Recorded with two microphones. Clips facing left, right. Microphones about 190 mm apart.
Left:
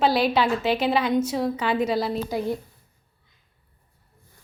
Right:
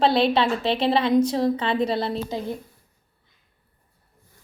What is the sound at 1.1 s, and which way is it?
Speech, 5° left (ahead or behind).